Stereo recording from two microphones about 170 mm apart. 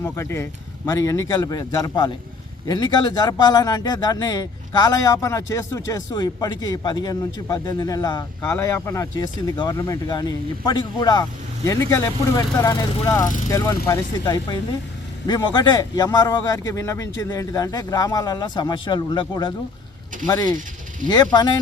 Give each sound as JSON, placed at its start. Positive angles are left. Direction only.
{"t": 0.0, "sound": "speech", "side_deg": 15}
{"t": 13.2, "sound": "speech", "side_deg": 50}
{"t": 13.5, "sound": "speech", "side_deg": 15}